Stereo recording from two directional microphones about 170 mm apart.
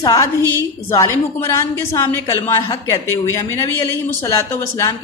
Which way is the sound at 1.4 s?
15° left (ahead or behind).